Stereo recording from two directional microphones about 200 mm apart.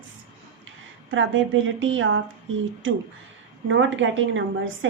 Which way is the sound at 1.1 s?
70° right (ahead or behind).